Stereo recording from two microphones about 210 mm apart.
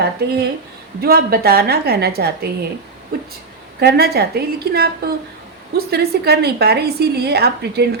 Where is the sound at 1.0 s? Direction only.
45° right (ahead or behind).